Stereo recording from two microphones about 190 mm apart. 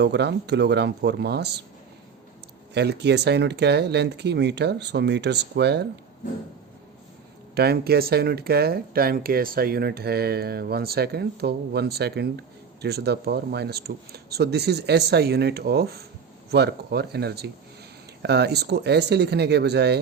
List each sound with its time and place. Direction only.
0.0 s speech: 65° right (ahead or behind)
2.7 s speech: 60° right (ahead or behind)
7.5 s speech: 55° right (ahead or behind)